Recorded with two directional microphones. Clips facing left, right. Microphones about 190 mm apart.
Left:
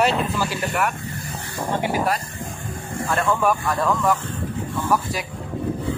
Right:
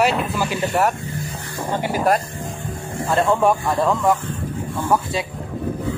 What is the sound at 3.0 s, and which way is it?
Speech, 25° right (ahead or behind).